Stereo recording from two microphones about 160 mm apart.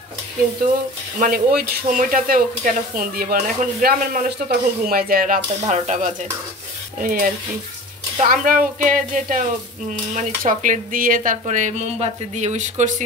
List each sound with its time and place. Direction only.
1.2 s speech: 65° right (ahead or behind); by 6.1 s 50° right (ahead or behind)
7.0 s speech: 60° right (ahead or behind)